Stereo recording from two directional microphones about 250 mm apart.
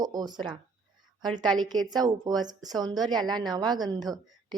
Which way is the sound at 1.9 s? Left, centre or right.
Centre.